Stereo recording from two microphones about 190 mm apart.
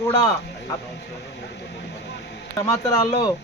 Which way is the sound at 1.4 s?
60° left (ahead or behind).